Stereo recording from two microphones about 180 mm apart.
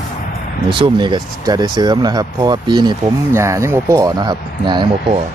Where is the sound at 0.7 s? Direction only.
25° right (ahead or behind).